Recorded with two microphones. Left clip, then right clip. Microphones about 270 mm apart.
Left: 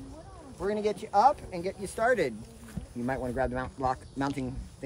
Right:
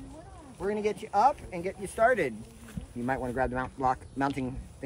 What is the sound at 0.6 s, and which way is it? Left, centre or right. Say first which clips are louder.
Speech: even; centre.